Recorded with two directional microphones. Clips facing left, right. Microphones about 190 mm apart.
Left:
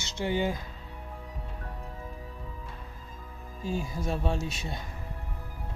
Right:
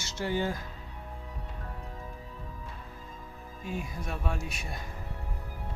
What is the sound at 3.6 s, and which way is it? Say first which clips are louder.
Speech: left 5 dB; 30° left (ahead or behind).